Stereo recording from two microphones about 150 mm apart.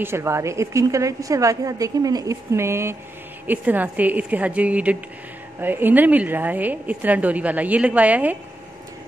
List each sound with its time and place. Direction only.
0.0 s a woman's voice: 15° right (ahead or behind)